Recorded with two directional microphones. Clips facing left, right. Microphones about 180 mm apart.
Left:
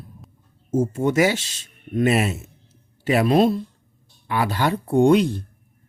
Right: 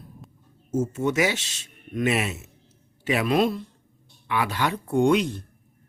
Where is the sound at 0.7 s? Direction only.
35° left (ahead or behind).